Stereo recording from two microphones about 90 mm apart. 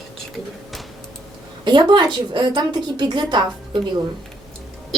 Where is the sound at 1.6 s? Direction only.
55° right (ahead or behind).